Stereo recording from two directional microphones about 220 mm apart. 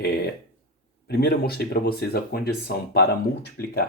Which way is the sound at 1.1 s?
45° left (ahead or behind).